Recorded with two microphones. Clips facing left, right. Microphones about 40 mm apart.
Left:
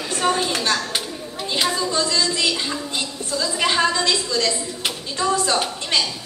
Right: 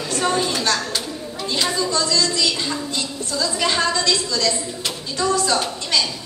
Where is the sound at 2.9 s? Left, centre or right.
Centre.